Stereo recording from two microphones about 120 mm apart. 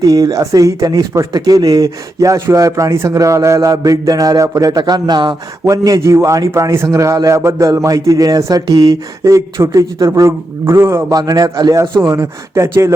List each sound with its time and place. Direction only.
0.0 s speech: 30° right (ahead or behind)